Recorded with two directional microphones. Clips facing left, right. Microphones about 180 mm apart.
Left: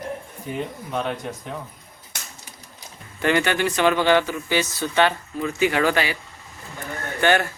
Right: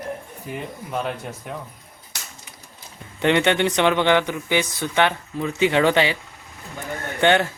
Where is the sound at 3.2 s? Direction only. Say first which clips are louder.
Right 2 dB; 25° right (ahead or behind).